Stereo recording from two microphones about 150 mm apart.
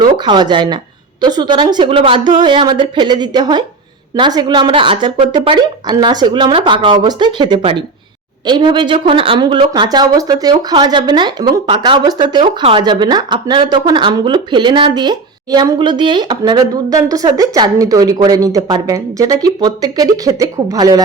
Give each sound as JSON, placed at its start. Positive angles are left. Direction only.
{"t": 0.0, "sound": "a woman's voice", "side_deg": -30}